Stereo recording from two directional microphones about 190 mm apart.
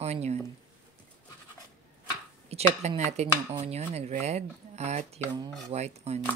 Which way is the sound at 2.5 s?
35° right (ahead or behind).